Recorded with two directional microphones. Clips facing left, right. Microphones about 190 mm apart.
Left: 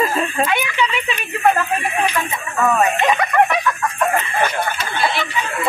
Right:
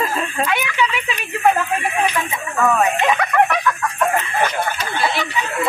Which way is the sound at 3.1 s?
5° left (ahead or behind).